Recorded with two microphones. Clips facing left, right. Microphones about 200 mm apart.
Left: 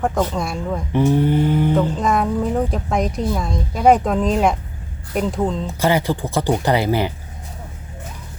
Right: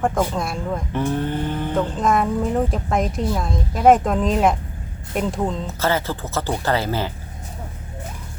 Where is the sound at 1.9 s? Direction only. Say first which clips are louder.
Left 1 dB; centre (ahead or behind).